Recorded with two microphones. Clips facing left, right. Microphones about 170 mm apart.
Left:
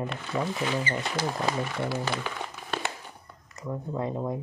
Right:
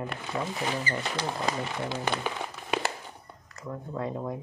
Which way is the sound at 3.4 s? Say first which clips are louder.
Left 4 dB; 20° left (ahead or behind).